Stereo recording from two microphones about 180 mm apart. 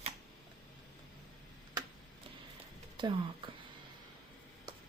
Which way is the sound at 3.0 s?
25° right (ahead or behind).